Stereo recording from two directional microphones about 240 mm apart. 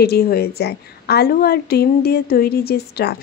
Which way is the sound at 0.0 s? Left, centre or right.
Left.